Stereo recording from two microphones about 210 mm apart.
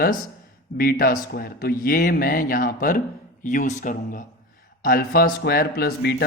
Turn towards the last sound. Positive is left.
turn(degrees=50)  # may be behind; listen again after turning